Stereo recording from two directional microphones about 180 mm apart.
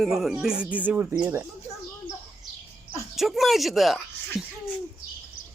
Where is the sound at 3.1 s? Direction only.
Centre (ahead or behind).